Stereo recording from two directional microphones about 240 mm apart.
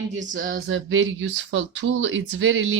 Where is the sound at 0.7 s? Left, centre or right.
Right.